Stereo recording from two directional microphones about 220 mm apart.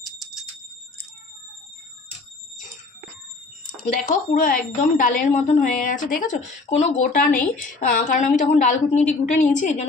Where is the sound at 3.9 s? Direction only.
35° left (ahead or behind).